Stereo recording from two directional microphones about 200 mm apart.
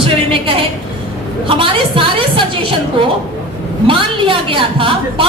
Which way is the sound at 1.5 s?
25° right (ahead or behind).